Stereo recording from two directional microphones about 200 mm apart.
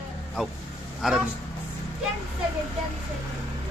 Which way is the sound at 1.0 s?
Centre (ahead or behind).